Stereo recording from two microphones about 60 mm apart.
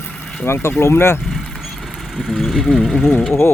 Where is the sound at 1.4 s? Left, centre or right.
Centre.